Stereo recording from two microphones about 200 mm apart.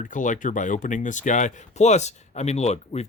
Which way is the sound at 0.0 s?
40° left (ahead or behind).